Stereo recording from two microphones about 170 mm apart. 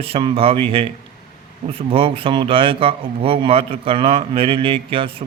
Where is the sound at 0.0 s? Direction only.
35° right (ahead or behind).